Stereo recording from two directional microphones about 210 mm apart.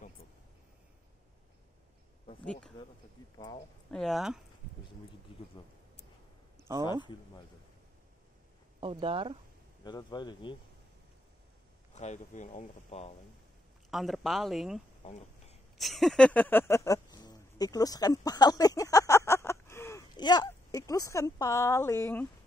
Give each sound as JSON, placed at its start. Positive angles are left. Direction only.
{"t": 3.9, "sound": "speech", "side_deg": 0}
{"t": 8.8, "sound": "speech", "side_deg": -25}
{"t": 9.8, "sound": "speech", "side_deg": 20}
{"t": 11.9, "sound": "speech", "side_deg": 35}
{"t": 13.8, "sound": "speech", "side_deg": 0}
{"t": 15.0, "sound": "a sound", "side_deg": 30}
{"t": 15.8, "sound": "speech", "side_deg": 0}